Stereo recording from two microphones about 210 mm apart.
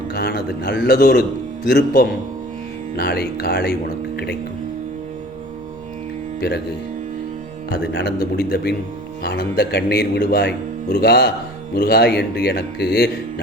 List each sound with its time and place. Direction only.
0.1 s speech: 50° left (ahead or behind)
7.7 s speech: 50° left (ahead or behind)